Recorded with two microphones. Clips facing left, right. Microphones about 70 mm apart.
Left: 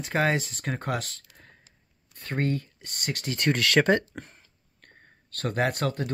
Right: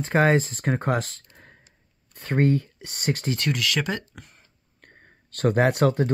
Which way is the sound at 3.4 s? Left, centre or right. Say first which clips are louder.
Left 6 dB; left.